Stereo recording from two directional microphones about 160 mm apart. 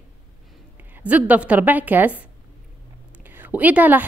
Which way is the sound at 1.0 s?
10° right (ahead or behind).